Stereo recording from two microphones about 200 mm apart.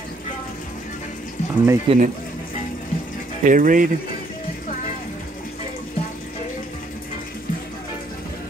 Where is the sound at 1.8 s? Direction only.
40° right (ahead or behind).